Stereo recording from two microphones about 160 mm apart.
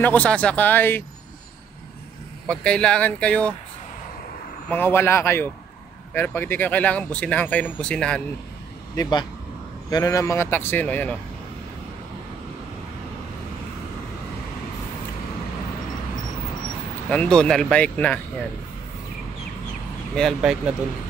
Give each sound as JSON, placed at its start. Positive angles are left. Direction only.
{"t": 0.0, "sound": "speech", "side_deg": 10}
{"t": 2.4, "sound": "speech", "side_deg": 5}
{"t": 4.6, "sound": "speech", "side_deg": 15}
{"t": 8.9, "sound": "speech", "side_deg": 25}
{"t": 17.1, "sound": "speech", "side_deg": 5}
{"t": 20.2, "sound": "speech", "side_deg": 0}